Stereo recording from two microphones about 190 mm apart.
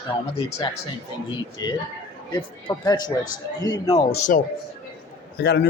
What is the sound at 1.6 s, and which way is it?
Speech, 20° left (ahead or behind).